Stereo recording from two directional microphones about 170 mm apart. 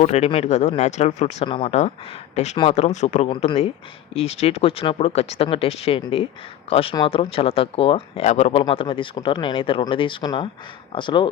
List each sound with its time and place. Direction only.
0.0 s speech: 40° left (ahead or behind)
3.2 s speech: 30° left (ahead or behind)